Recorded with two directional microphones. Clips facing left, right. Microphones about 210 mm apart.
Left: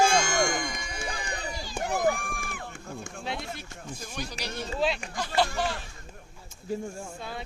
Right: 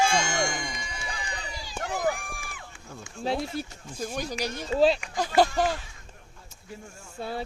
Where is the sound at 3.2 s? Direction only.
35° right (ahead or behind).